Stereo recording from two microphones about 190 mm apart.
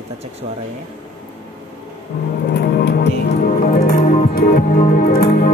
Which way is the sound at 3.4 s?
45° left (ahead or behind).